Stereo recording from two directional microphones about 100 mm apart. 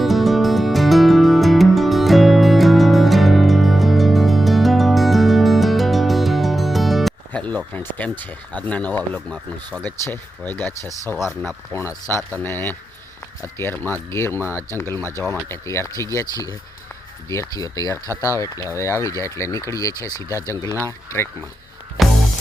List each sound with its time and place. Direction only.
0.0 s music: centre (ahead or behind)
7.3 s speech: 15° left (ahead or behind)
11.7 s speech: 30° left (ahead or behind)
22.0 s music: centre (ahead or behind)